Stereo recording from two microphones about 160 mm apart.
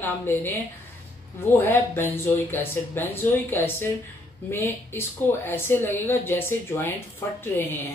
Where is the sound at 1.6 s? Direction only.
15° left (ahead or behind).